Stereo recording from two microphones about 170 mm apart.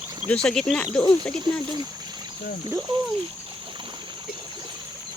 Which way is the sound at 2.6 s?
25° right (ahead or behind).